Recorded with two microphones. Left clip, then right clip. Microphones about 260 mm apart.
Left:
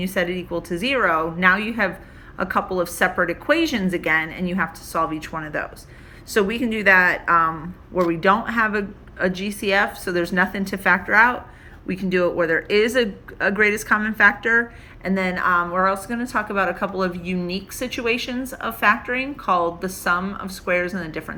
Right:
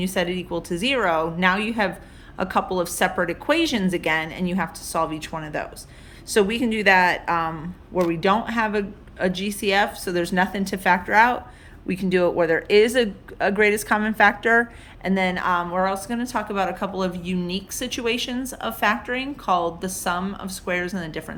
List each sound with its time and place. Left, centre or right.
0.0 s speech: centre